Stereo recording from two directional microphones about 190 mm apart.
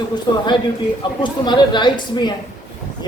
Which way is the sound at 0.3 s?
25° left (ahead or behind).